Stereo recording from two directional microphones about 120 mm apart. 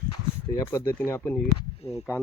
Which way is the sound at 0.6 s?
25° left (ahead or behind).